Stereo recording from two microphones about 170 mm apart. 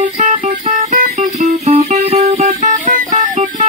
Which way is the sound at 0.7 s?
55° right (ahead or behind).